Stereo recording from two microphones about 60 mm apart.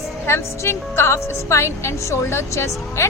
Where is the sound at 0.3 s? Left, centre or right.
Left.